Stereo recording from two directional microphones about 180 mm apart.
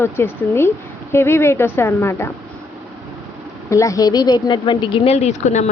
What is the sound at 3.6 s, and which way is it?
Speech, 15° left (ahead or behind).